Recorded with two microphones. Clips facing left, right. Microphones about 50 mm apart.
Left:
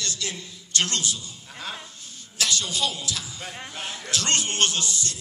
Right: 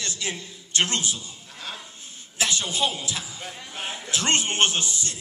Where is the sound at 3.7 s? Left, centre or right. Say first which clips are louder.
Right 1 dB; centre.